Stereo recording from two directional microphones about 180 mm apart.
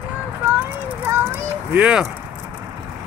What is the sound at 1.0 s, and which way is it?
A child's voice, 10° right (ahead or behind).